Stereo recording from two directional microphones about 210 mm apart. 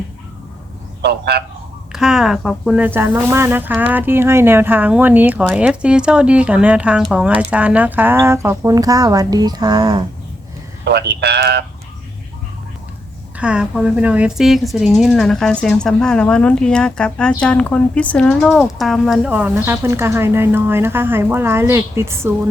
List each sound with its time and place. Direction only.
1.0 s speech: 50° right (ahead or behind)
1.9 s speech: centre (ahead or behind); by 10.1 s 20° right (ahead or behind)
10.8 s speech: 50° right (ahead or behind)
13.3 s speech: 5° right (ahead or behind)